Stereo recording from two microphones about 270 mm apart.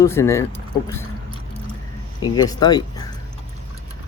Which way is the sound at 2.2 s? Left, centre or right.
Centre.